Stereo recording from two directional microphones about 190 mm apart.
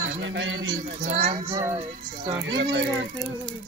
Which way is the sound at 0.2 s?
80° right.